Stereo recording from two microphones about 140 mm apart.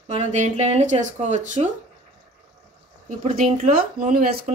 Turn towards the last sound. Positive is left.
turn(degrees=-75)  # may be behind; listen again after turning